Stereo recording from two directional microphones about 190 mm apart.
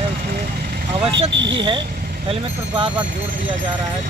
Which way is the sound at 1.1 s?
70° right (ahead or behind).